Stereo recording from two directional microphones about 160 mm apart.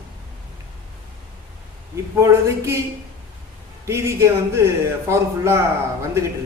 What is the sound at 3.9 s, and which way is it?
A man's voice, 15° right (ahead or behind).